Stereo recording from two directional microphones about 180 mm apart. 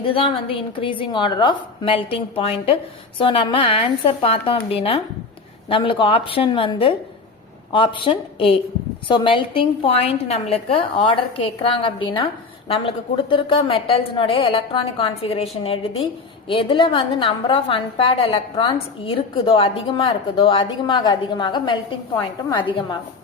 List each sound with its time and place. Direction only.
0.0 s a woman's voice: 30° left (ahead or behind)